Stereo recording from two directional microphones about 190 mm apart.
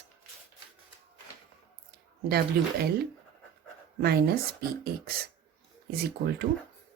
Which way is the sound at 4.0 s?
55° right (ahead or behind).